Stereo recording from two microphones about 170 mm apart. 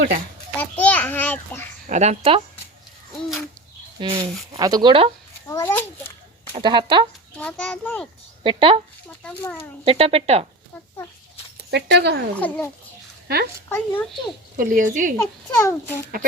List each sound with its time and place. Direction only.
0.6 s a child's voice: 10° left (ahead or behind)
1.9 s speech: 40° right (ahead or behind)
4.0 s speech: 30° right (ahead or behind)
5.5 s a child's voice: 15° left (ahead or behind)
6.5 s speech: 30° right (ahead or behind)
7.3 s a child's voice: 10° left (ahead or behind)
8.4 s speech: 30° right (ahead or behind)
9.2 s a child's voice: 10° left (ahead or behind)
9.8 s speech: 35° right (ahead or behind)
11.7 s speech: 80° right
13.2 s speech: 70° right (ahead or behind)
13.7 s a child's voice: 10° left (ahead or behind)
14.5 s speech: 50° right (ahead or behind)
15.2 s a child's voice: 15° left (ahead or behind)